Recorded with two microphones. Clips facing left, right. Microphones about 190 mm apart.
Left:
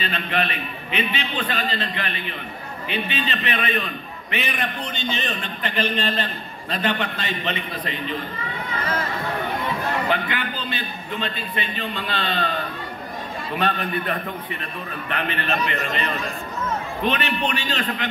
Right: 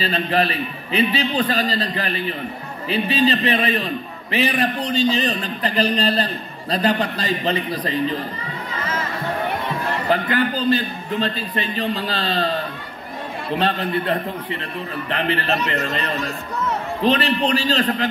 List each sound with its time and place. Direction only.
0.0 s a man's voice: 35° right (ahead or behind)
10.0 s a man's voice: 40° right (ahead or behind)
13.6 s a man's voice: 30° right (ahead or behind)